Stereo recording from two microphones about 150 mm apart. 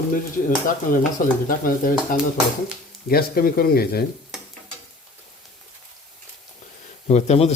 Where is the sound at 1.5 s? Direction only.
70° left (ahead or behind).